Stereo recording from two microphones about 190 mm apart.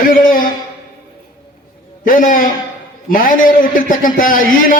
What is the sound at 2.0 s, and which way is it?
Speech, 45° left (ahead or behind).